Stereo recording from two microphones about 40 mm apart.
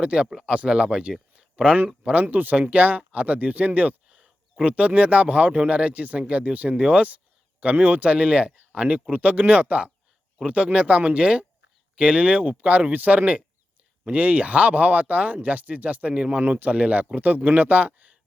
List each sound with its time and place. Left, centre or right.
0.0 s speech: right
0.3 s speech: centre
0.5 s speech: right
2.2 s speech: right
17.2 s speech: right